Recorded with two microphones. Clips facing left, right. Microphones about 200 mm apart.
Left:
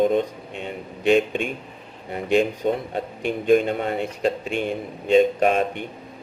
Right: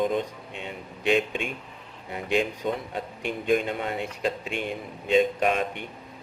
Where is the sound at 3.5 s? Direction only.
45° left (ahead or behind).